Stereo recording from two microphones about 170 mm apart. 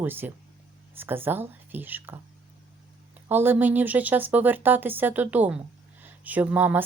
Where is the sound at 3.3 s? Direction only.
10° right (ahead or behind).